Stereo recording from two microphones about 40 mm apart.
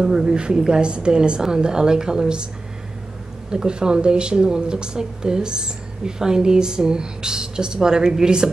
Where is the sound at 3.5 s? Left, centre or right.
Centre.